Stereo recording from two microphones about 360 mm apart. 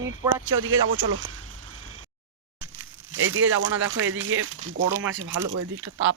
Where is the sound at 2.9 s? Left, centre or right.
Right.